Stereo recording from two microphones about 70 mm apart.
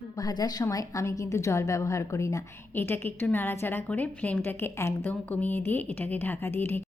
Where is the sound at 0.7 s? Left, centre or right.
Left.